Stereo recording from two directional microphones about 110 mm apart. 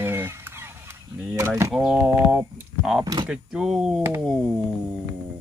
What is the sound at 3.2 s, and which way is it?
Speech, 5° right (ahead or behind).